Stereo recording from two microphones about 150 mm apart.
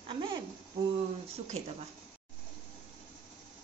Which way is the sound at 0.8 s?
25° right (ahead or behind).